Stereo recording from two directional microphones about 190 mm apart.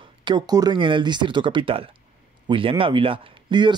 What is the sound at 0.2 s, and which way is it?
Speech, 20° right (ahead or behind).